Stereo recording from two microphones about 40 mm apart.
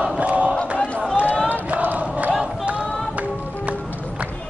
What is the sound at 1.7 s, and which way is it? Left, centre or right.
Crowd, right.